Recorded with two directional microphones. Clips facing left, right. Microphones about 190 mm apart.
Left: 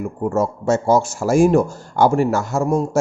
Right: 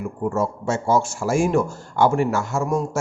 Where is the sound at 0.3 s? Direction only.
40° left (ahead or behind).